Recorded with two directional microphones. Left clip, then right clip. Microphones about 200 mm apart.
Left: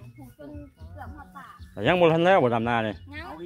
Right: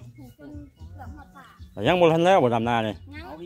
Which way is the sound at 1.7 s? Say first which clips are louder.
Right 1 dB; 10° right (ahead or behind).